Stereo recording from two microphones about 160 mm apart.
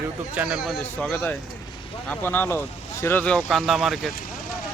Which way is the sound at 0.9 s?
10° left (ahead or behind).